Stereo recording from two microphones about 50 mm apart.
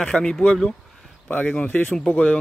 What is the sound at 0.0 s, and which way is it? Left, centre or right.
Speech, centre.